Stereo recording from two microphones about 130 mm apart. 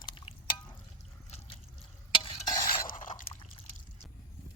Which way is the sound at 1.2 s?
55° left (ahead or behind).